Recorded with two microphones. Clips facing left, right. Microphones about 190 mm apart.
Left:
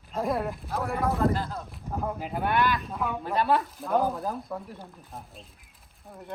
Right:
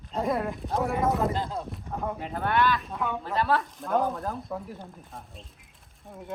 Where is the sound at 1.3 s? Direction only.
25° right (ahead or behind).